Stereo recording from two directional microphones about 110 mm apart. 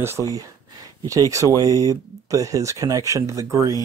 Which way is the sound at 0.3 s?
35° right (ahead or behind).